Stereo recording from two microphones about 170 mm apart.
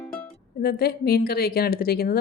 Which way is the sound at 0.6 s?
65° left (ahead or behind).